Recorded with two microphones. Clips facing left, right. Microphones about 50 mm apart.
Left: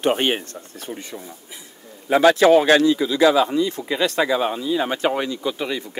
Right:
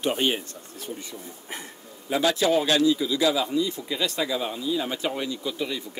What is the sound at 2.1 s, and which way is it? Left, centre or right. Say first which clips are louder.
Speech: left 9 dB; left.